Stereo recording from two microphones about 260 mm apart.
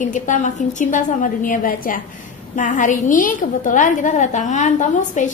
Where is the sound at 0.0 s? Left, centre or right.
Left.